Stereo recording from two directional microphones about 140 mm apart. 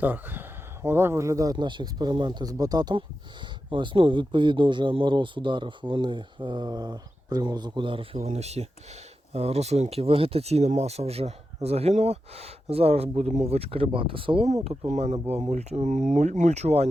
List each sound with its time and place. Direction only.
0.0 s speech: 15° right (ahead or behind); by 16.9 s 50° right (ahead or behind)